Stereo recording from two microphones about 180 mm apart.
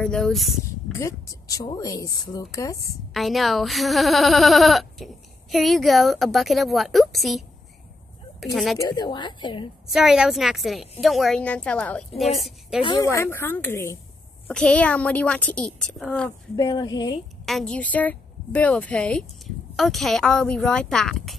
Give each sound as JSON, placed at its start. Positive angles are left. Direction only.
{"t": 0.0, "sound": "speech", "side_deg": 5}
{"t": 0.9, "sound": "a woman's voice", "side_deg": 15}
{"t": 3.1, "sound": "speech", "side_deg": 0}
{"t": 8.7, "sound": "a woman's voice", "side_deg": 25}
{"t": 9.8, "sound": "speech", "side_deg": 0}
{"t": 12.8, "sound": "a woman's voice", "side_deg": 20}
{"t": 16.5, "sound": "a woman's voice", "side_deg": 20}
{"t": 17.5, "sound": "speech", "side_deg": 5}